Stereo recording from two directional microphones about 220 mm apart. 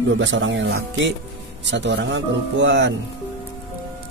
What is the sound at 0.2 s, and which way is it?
Speech, 60° right (ahead or behind).